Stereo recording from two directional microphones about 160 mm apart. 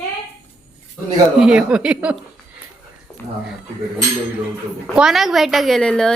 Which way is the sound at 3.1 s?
10° left (ahead or behind).